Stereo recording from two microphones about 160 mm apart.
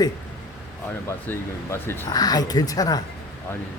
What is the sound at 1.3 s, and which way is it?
Speech, 15° left (ahead or behind).